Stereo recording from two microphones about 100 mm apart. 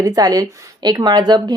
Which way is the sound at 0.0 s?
40° right (ahead or behind).